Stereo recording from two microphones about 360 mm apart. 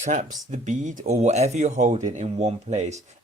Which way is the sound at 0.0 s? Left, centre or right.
Centre.